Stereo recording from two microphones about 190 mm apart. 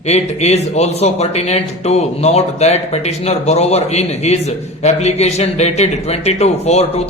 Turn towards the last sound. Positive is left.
turn(degrees=35)  # may be behind; listen again after turning